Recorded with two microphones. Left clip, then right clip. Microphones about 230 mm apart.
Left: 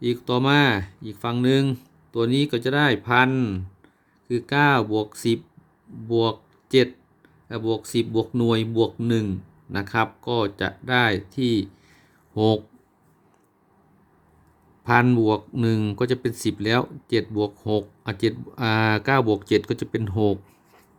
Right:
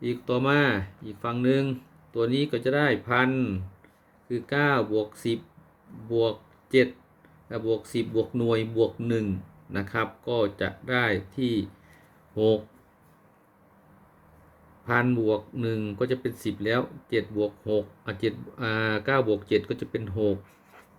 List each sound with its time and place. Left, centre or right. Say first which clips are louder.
0.0 s speech: left 4 dB; left
14.8 s speech: left 5 dB; left